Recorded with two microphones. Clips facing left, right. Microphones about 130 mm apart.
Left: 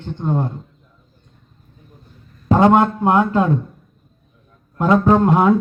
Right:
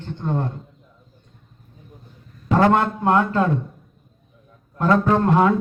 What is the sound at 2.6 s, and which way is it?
Speech, 15° left (ahead or behind).